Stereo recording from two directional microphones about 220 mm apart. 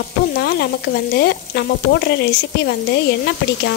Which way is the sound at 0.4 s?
45° left (ahead or behind).